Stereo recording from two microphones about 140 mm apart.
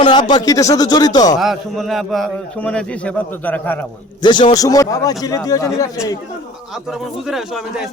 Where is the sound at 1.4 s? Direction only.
Centre (ahead or behind).